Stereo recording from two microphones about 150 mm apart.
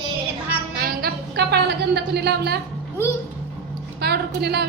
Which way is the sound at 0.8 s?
90° right.